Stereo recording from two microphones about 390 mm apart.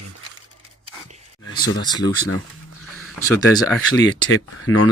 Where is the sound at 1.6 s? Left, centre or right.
Centre.